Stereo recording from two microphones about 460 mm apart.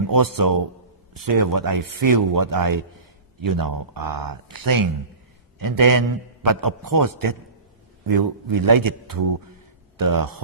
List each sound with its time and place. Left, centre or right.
0.1 s a man's voice: right